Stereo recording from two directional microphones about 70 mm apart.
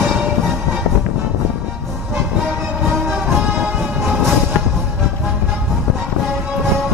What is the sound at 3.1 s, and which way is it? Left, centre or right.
Music, right.